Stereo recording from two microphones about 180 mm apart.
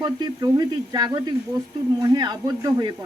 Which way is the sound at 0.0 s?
20° right (ahead or behind).